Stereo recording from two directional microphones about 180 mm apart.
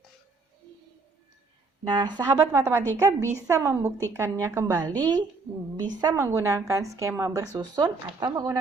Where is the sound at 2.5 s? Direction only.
15° right (ahead or behind).